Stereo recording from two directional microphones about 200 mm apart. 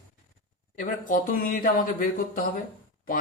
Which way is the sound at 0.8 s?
45° left (ahead or behind).